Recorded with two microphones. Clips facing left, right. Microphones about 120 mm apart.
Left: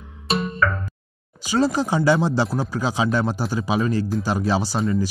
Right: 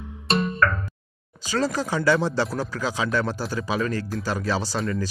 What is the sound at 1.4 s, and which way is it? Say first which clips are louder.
Speech: left 5 dB; 15° left (ahead or behind).